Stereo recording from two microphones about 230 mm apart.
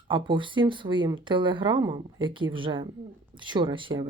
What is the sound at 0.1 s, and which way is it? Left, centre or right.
Speech, right.